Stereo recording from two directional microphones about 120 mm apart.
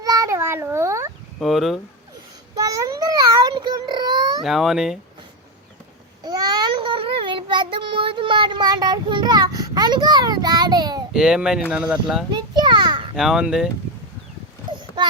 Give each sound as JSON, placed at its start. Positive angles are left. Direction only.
{"t": 0.0, "sound": "meow", "side_deg": -30}
{"t": 1.4, "sound": "speech", "side_deg": 0}
{"t": 2.6, "sound": "a sound", "side_deg": -30}
{"t": 4.4, "sound": "speech", "side_deg": -5}
{"t": 6.2, "sound": "child singing", "side_deg": -35}
{"t": 11.1, "sound": "speech", "side_deg": -5}
{"t": 12.3, "sound": "children playing", "side_deg": -40}
{"t": 13.1, "sound": "speech", "side_deg": -5}
{"t": 14.7, "sound": "a sound", "side_deg": -40}